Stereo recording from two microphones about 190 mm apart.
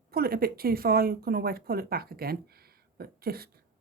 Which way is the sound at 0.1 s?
55° right (ahead or behind).